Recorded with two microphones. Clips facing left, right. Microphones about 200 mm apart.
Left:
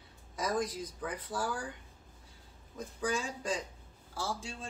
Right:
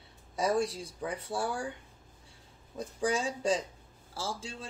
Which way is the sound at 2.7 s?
35° right (ahead or behind).